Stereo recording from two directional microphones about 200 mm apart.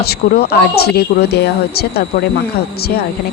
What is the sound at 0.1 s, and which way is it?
Speech, 50° left (ahead or behind).